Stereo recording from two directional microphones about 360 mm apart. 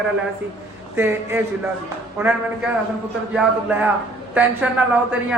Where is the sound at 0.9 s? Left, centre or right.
Centre.